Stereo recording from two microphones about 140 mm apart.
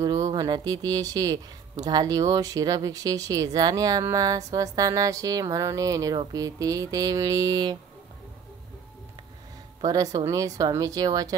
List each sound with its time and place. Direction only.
0.3 s speech: 30° right (ahead or behind)
9.8 s speech: 25° right (ahead or behind)